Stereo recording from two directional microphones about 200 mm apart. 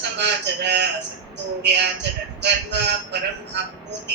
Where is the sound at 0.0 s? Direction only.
60° right (ahead or behind).